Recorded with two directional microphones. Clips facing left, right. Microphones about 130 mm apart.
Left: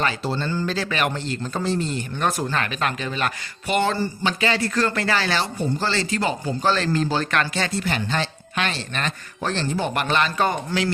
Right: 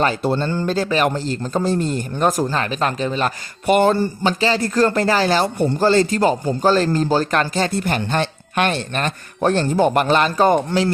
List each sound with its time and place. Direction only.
0.0 s speech: 50° right (ahead or behind)
3.7 s speech: 50° right (ahead or behind)
7.7 s speech: 50° right (ahead or behind)